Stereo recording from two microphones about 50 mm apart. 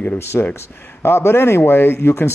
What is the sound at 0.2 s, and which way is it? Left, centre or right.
Speech, left.